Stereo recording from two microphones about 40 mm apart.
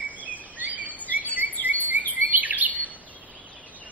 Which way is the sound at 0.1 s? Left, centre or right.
Right.